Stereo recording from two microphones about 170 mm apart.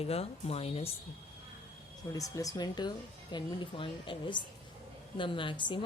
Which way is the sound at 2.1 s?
20° left (ahead or behind).